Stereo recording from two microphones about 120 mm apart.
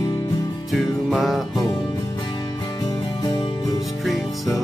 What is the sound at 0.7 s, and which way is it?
Music, centre (ahead or behind).